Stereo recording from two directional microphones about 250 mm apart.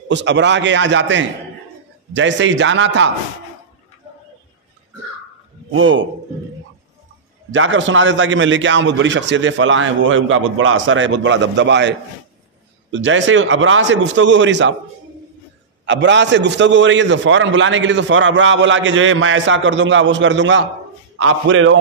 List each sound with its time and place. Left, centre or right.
0.1 s a man's voice: right
5.8 s a man's voice: right
7.5 s a man's voice: right
12.9 s a man's voice: right
15.8 s a man's voice: right